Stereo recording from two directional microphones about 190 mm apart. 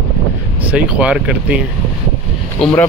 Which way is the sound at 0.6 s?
5° right (ahead or behind).